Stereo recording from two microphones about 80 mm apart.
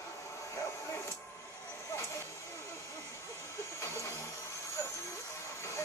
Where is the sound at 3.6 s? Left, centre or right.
Left.